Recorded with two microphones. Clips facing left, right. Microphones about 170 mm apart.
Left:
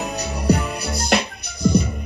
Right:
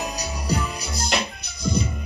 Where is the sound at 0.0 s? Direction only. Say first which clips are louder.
Left 6 dB; 65° left (ahead or behind).